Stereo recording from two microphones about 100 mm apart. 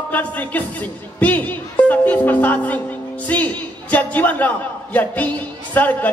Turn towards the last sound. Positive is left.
turn(degrees=15)  # may be behind; listen again after turning